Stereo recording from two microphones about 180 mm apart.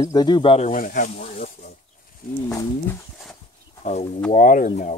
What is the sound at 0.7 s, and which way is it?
Speech, 45° left (ahead or behind).